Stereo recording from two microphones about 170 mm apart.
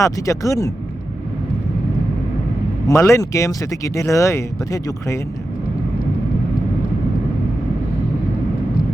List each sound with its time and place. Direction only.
0.0 s speech: 20° left (ahead or behind)
2.8 s speech: 15° left (ahead or behind)